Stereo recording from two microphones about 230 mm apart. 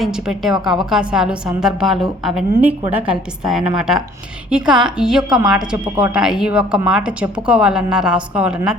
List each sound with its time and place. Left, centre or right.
0.0 s a woman's voice: centre